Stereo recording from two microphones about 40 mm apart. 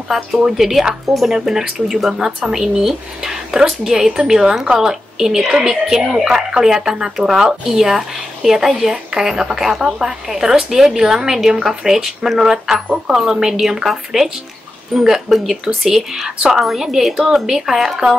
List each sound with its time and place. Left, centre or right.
0.1 s speech: centre